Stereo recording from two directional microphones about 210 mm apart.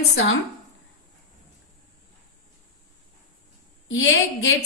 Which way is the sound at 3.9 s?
70° left (ahead or behind).